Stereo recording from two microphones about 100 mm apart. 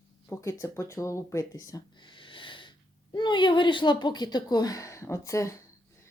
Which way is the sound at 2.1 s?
55° left (ahead or behind).